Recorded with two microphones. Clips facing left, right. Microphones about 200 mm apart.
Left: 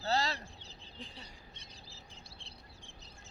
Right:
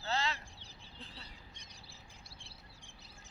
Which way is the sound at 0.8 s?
15° left (ahead or behind).